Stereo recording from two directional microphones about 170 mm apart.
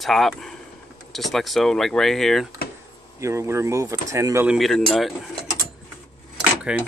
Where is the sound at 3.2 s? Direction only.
15° right (ahead or behind).